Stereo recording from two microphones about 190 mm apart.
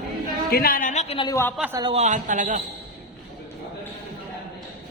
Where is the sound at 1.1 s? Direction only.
20° left (ahead or behind).